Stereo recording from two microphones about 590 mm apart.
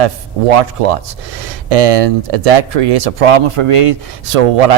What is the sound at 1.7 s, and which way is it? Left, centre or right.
Speech, right.